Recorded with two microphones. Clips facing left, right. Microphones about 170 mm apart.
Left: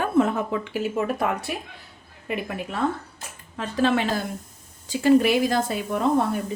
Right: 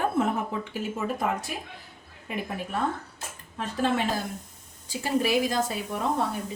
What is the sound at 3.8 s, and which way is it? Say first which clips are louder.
Speech: left 5 dB; 90° left.